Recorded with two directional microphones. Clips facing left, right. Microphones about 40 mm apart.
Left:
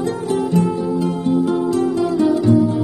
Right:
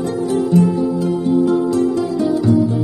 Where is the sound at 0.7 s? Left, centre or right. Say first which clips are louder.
Right 2 dB; left.